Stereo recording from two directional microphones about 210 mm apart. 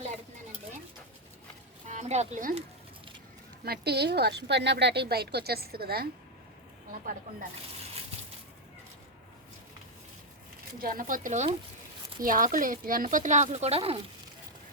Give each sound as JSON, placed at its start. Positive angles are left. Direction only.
{"t": 1.9, "sound": "speech", "side_deg": -35}
{"t": 3.6, "sound": "speech", "side_deg": -50}
{"t": 10.8, "sound": "speech", "side_deg": -40}